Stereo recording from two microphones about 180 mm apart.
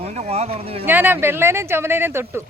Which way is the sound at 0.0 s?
35° right (ahead or behind).